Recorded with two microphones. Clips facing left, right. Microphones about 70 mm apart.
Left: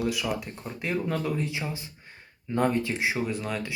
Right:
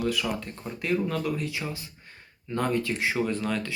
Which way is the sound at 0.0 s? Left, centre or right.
Centre.